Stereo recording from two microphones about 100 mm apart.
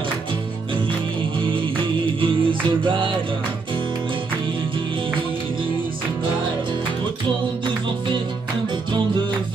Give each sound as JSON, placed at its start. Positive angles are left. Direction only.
{"t": 2.1, "sound": "music", "side_deg": -60}